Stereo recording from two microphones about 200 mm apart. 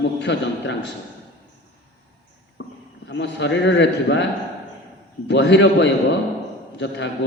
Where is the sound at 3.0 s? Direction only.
60° left (ahead or behind).